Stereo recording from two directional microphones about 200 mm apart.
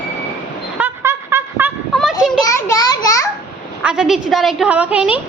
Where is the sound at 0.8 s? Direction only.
10° right (ahead or behind).